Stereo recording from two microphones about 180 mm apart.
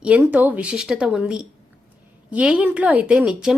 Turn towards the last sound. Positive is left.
turn(degrees=-5)  # may be behind; listen again after turning